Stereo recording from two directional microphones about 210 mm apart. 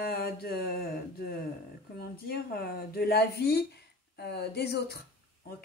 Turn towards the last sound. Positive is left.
turn(degrees=50)  # may be behind; listen again after turning